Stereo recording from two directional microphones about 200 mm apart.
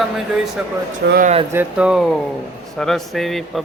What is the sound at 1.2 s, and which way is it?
Speech, 30° right (ahead or behind).